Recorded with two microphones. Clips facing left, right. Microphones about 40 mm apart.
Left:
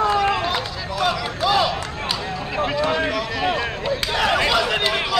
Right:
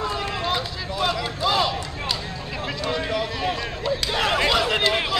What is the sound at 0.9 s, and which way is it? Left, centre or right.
Run, centre.